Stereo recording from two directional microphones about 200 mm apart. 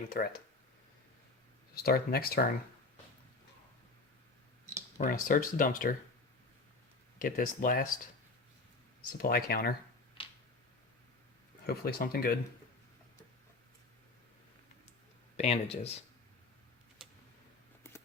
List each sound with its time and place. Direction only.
0.1 s speech: 45° left (ahead or behind)
1.7 s speech: 50° left (ahead or behind)
4.9 s speech: 40° left (ahead or behind)
7.2 s speech: 45° left (ahead or behind)
9.1 s speech: 50° left (ahead or behind)
11.6 s speech: 50° left (ahead or behind)
15.4 s speech: 30° left (ahead or behind)
17.0 s tick-tock: centre (ahead or behind)